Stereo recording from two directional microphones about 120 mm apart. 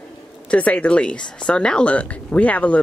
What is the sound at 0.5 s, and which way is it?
Speech, 10° left (ahead or behind).